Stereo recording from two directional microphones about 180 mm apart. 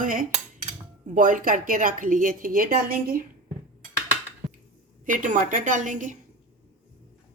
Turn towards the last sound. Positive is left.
turn(degrees=-45)  # may be behind; listen again after turning